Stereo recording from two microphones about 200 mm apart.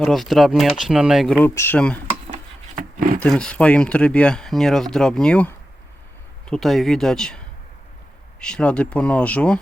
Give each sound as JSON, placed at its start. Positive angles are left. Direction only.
{"t": 0.0, "sound": "speech", "side_deg": 0}
{"t": 1.5, "sound": "speech", "side_deg": 10}
{"t": 2.3, "sound": "a sound", "side_deg": -40}
{"t": 3.2, "sound": "speech", "side_deg": 5}